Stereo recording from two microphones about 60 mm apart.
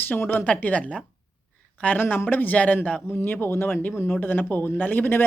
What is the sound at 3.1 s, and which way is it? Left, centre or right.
Speech, left.